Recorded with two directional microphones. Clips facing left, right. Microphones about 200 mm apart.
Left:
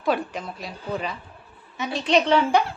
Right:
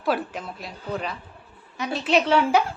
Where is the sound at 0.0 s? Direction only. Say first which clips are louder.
Left 1 dB; 5° right (ahead or behind).